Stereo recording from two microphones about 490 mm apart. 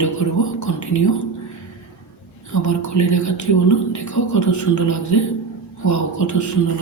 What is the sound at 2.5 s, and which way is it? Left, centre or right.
Speech, left.